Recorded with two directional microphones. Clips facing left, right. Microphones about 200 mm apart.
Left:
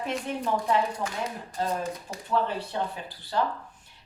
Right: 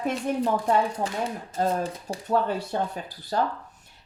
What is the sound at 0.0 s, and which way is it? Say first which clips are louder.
Speech: right 5 dB; 45° right (ahead or behind).